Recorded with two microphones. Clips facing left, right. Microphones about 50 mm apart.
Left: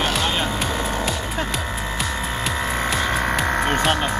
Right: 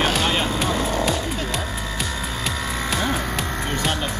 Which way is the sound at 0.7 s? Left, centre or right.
Left.